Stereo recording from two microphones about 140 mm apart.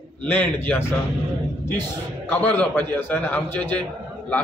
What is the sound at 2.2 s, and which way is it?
A man's voice, 10° left (ahead or behind).